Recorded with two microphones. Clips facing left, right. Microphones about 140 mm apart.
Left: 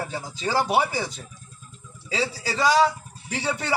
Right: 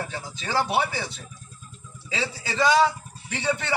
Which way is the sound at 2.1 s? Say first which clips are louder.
Left 3 dB; 35° left (ahead or behind).